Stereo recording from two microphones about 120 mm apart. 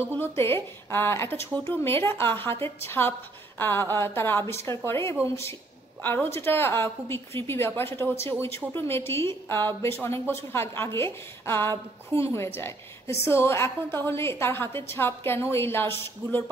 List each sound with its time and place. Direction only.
0.0 s speech: 20° left (ahead or behind)